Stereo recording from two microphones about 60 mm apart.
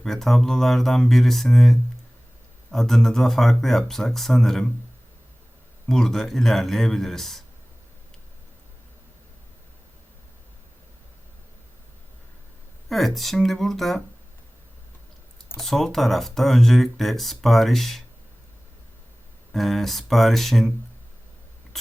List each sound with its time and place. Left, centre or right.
0.0 s speech: centre
5.9 s speech: centre
12.9 s speech: centre
15.6 s speech: centre
19.5 s speech: centre